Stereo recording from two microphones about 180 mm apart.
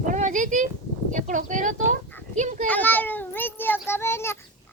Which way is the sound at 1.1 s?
45° right (ahead or behind).